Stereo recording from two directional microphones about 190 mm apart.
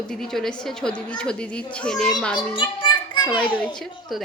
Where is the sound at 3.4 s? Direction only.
10° left (ahead or behind).